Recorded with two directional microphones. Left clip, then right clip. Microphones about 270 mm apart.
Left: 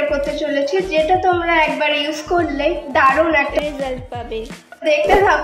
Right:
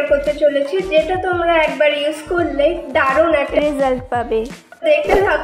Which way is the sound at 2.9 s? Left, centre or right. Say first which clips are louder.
Left 3 dB; centre.